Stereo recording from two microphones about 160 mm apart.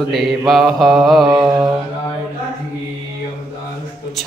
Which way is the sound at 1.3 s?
20° right (ahead or behind).